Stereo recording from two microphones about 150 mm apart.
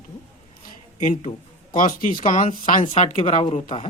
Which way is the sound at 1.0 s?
55° left (ahead or behind).